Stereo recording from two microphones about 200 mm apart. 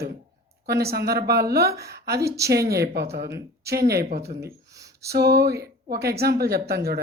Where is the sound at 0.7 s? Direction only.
50° right (ahead or behind).